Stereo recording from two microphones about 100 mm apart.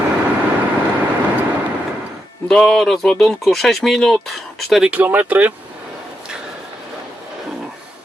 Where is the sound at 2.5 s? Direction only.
5° left (ahead or behind).